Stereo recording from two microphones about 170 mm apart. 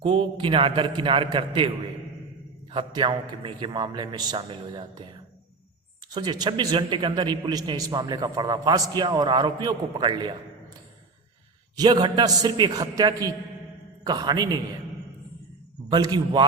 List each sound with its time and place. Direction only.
0.0 s a man's voice: 30° right (ahead or behind)
2.7 s a man's voice: 25° right (ahead or behind)
6.1 s a man's voice: 25° right (ahead or behind)
11.8 s a man's voice: 25° right (ahead or behind)
15.9 s a man's voice: 25° right (ahead or behind)